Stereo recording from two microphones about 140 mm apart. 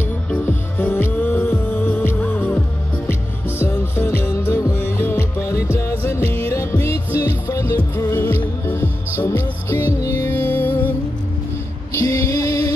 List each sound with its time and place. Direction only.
0.3 s music: 10° left (ahead or behind)
11.9 s music: 20° left (ahead or behind)